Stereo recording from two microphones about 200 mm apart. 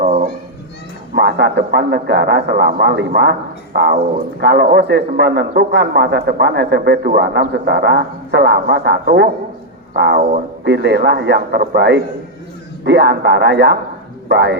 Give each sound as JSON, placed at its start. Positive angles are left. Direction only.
{"t": 0.0, "sound": "children playing", "side_deg": -35}
{"t": 1.1, "sound": "a man's voice", "side_deg": -55}